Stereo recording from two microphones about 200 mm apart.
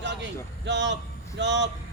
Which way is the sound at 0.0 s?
60° right (ahead or behind).